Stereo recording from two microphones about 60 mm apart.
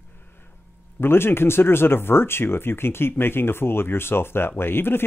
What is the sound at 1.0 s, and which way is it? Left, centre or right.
Speech, left.